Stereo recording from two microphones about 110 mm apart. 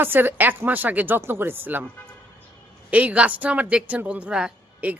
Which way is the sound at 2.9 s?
10° right (ahead or behind).